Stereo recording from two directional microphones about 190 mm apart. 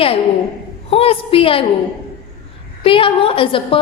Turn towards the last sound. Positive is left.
turn(degrees=30)  # may be behind; listen again after turning